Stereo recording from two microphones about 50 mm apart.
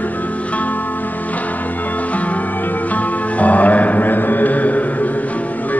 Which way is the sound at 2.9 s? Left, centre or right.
Left.